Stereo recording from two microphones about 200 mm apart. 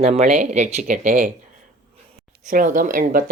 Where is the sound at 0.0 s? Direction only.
35° right (ahead or behind).